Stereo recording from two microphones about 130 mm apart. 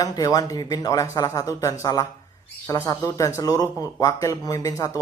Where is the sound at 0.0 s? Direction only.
30° left (ahead or behind).